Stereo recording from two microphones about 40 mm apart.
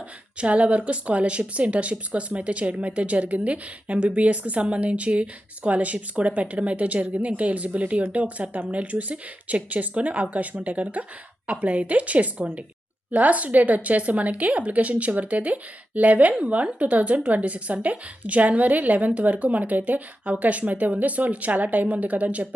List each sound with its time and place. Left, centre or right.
0.3 s a woman's voice: right